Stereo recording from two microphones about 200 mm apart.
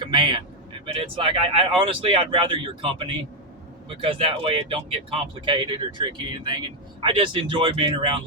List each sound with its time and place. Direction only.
0.0 s vehicle: 25° right (ahead or behind)
0.9 s speech: 30° right (ahead or behind)